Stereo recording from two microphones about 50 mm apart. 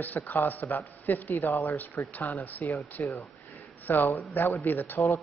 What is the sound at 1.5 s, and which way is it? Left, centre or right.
Speech, left.